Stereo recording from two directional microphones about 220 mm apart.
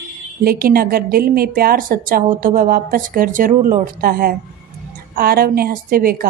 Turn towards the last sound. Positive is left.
turn(degrees=-40)  # may be behind; listen again after turning